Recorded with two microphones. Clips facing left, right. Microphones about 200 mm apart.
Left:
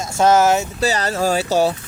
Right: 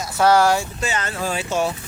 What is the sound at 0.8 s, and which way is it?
Speech, 35° left (ahead or behind).